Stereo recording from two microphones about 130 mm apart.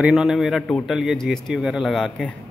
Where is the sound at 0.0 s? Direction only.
Centre (ahead or behind).